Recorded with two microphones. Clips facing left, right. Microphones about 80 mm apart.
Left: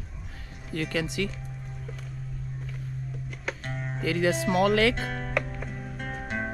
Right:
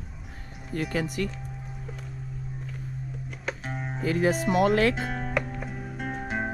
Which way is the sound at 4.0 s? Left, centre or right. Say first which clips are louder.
Right 1 dB; left.